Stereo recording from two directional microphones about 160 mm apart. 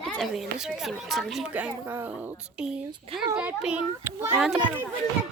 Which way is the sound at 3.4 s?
10° right (ahead or behind).